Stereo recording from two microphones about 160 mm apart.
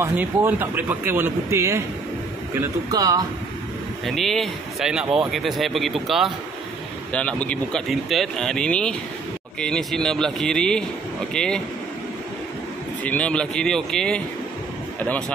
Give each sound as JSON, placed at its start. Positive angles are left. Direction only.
{"t": 0.0, "sound": "speech", "side_deg": -15}
{"t": 4.0, "sound": "speech", "side_deg": 0}
{"t": 13.0, "sound": "speech", "side_deg": 10}